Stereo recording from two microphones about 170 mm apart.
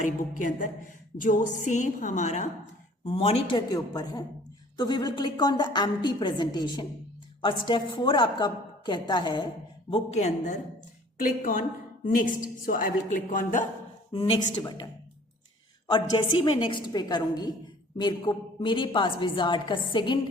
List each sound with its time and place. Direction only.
0.0 s a woman's voice: 50° left (ahead or behind)
3.7 s a woman's voice: 20° left (ahead or behind)
9.9 s a woman's voice: 40° left (ahead or behind)
14.1 s a woman's voice: 35° left (ahead or behind)
15.9 s a woman's voice: 25° left (ahead or behind)